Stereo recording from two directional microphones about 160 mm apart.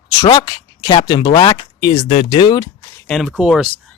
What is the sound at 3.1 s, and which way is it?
Speech, centre (ahead or behind).